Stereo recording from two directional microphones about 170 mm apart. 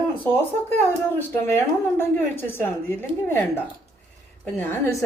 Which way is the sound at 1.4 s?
15° left (ahead or behind).